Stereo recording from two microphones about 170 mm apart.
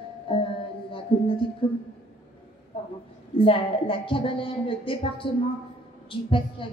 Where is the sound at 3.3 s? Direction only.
30° left (ahead or behind).